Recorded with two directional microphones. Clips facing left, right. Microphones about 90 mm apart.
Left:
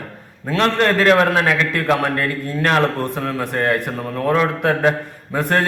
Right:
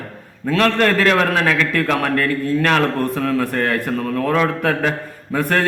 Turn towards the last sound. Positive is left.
turn(degrees=25)  # may be behind; listen again after turning